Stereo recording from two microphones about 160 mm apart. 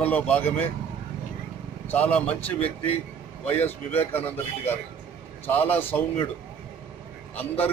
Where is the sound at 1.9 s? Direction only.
10° left (ahead or behind).